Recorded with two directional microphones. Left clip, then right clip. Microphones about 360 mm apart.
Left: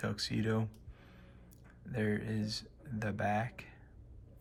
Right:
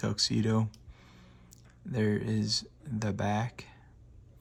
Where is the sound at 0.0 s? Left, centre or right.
Centre.